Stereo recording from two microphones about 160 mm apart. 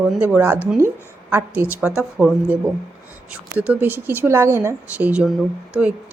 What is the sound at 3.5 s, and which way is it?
Speech, 10° right (ahead or behind).